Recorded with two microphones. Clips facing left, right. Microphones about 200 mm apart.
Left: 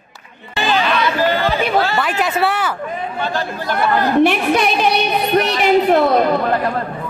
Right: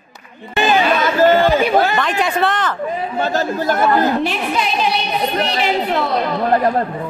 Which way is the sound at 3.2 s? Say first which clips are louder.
Right 6 dB; 45° right (ahead or behind).